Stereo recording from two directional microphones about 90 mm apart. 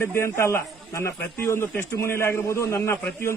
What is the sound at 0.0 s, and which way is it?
A man's voice, 30° left (ahead or behind).